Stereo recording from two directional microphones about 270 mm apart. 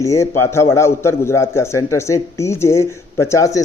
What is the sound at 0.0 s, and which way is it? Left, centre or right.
Speech, centre.